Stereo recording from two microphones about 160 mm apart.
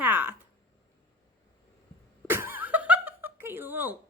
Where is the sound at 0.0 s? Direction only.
10° right (ahead or behind).